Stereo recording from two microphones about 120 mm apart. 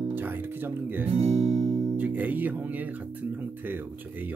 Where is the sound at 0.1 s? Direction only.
15° right (ahead or behind).